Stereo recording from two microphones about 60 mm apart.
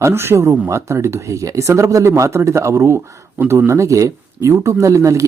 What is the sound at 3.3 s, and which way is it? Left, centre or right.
Speech, right.